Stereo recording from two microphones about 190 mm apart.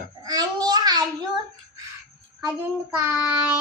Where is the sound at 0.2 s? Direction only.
20° right (ahead or behind).